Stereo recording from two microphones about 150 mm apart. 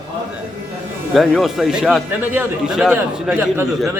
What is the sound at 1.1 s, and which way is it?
A man's voice, centre (ahead or behind).